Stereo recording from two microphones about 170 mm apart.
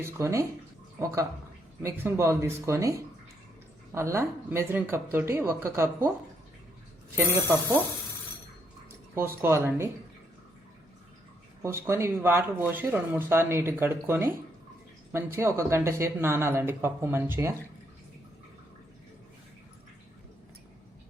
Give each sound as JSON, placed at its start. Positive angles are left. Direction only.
{"t": 0.0, "sound": "speech", "side_deg": -15}
{"t": 3.9, "sound": "speech", "side_deg": -15}
{"t": 9.1, "sound": "speech", "side_deg": -15}
{"t": 11.6, "sound": "speech", "side_deg": -15}